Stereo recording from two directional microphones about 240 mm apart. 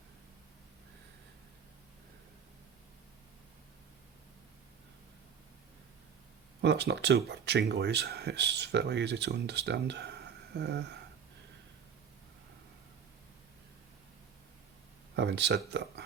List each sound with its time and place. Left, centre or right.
6.6 s speech: right
15.1 s speech: right